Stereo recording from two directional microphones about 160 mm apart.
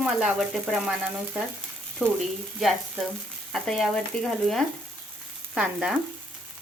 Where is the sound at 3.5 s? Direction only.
5° left (ahead or behind).